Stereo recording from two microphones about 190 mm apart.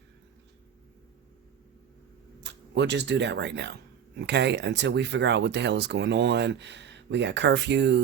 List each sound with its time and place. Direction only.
2.4 s speech: 65° right (ahead or behind)